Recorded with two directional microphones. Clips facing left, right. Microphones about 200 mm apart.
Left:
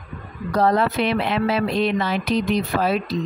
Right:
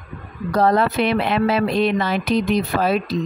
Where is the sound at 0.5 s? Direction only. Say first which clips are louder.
Right 2 dB; 50° right (ahead or behind).